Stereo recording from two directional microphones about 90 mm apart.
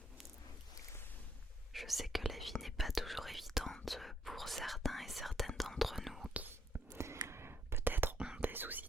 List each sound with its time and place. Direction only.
1.7 s whispering: centre (ahead or behind)
6.3 s whispering: 20° right (ahead or behind)